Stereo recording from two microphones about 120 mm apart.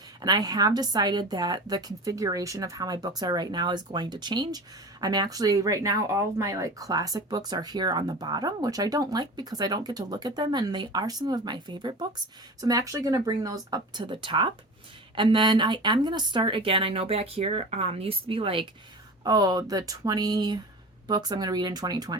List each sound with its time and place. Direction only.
0.2 s a woman's voice: 35° right (ahead or behind)
19.2 s a woman's voice: 35° right (ahead or behind)